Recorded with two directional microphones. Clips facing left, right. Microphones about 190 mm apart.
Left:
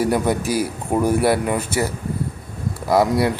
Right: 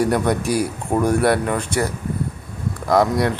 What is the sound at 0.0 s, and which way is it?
Speech, 5° left (ahead or behind).